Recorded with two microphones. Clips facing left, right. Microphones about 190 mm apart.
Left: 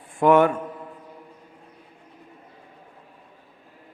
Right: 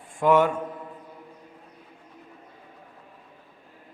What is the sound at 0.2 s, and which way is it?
Speech, 60° left (ahead or behind).